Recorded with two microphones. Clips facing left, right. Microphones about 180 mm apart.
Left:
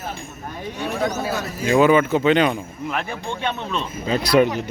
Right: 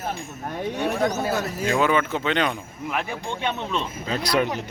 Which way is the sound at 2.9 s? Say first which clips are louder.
Even; 15° right (ahead or behind).